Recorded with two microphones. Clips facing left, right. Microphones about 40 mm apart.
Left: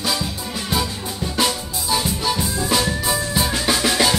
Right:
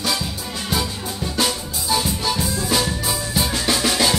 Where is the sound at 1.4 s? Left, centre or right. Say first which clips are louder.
Left 1 dB; centre.